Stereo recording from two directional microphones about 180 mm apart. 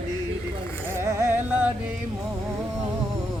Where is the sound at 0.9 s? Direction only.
15° right (ahead or behind).